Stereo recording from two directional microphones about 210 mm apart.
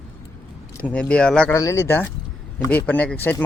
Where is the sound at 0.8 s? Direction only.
5° left (ahead or behind).